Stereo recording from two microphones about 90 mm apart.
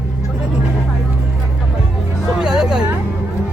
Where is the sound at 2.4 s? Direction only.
10° right (ahead or behind).